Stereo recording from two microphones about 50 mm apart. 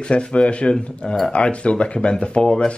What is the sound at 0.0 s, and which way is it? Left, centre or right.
Speech, centre.